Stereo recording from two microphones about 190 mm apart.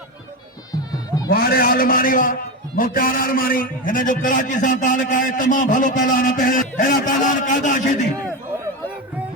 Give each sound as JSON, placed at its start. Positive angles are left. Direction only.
{"t": 1.3, "sound": "a man's voice", "side_deg": 50}